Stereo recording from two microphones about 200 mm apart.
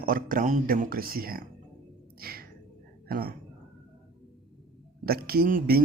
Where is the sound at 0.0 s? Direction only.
45° right (ahead or behind).